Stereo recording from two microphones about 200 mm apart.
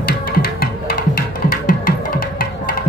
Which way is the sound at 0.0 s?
45° left (ahead or behind).